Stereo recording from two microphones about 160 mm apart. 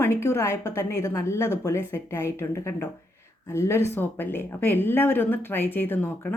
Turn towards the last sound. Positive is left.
turn(degrees=10)  # may be behind; listen again after turning